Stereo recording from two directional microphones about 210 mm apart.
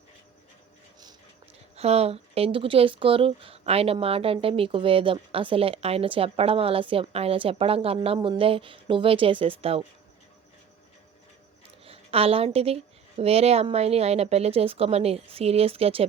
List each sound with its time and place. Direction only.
1.7 s speech: 30° right (ahead or behind)
11.9 s speech: 25° right (ahead or behind)